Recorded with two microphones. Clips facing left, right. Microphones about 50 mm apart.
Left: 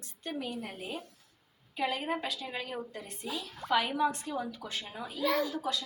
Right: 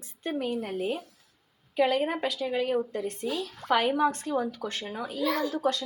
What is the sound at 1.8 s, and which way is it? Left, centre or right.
A woman's voice, right.